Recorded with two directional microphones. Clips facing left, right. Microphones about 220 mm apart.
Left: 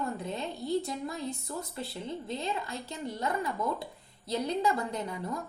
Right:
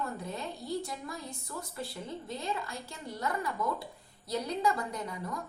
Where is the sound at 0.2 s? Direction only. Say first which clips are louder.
Left 3 dB; 20° left (ahead or behind).